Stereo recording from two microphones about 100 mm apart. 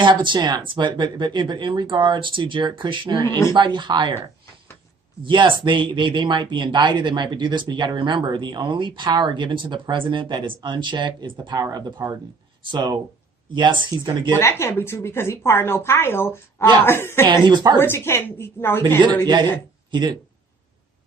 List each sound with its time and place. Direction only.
0.0 s speech: 55° right (ahead or behind)
3.2 s a woman's voice: 25° left (ahead or behind)
3.5 s speech: 50° right (ahead or behind)
5.2 s speech: 55° right (ahead or behind)
14.3 s a woman's voice: 25° left (ahead or behind)
17.2 s speech: 50° right (ahead or behind)
17.7 s a woman's voice: 25° left (ahead or behind)
19.3 s speech: 50° right (ahead or behind)